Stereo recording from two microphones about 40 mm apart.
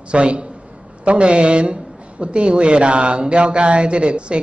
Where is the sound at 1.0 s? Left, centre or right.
Right.